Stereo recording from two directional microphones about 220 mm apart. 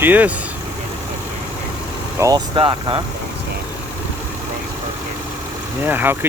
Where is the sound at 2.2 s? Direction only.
15° right (ahead or behind).